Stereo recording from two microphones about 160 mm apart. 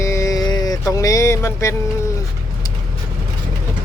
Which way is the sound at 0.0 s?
20° left (ahead or behind).